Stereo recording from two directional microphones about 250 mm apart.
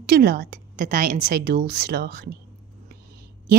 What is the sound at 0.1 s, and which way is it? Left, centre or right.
Speech, right.